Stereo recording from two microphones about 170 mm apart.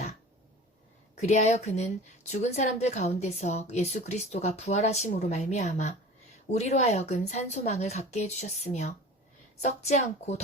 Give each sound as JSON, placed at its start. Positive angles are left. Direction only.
{"t": 1.2, "sound": "a woman's voice", "side_deg": 40}